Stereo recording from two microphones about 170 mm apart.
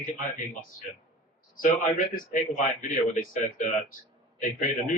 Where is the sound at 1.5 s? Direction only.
50° left (ahead or behind).